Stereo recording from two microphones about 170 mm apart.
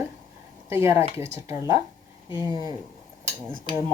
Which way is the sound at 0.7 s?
15° right (ahead or behind).